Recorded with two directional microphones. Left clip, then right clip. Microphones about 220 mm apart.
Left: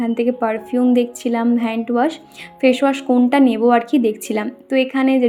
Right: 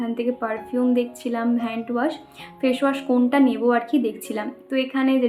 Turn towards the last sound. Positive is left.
turn(degrees=30)  # may be behind; listen again after turning